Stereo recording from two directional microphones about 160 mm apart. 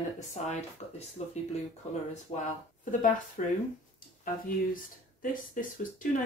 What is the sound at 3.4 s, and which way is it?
Speech, 50° left (ahead or behind).